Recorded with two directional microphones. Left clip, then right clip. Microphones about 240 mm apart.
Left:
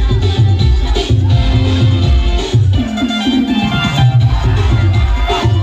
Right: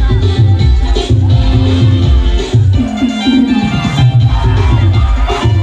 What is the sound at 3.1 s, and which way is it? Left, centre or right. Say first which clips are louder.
Music: right 3 dB; left.